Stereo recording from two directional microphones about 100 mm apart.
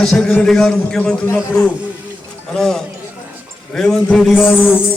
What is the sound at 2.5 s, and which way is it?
A man's voice, 5° left (ahead or behind).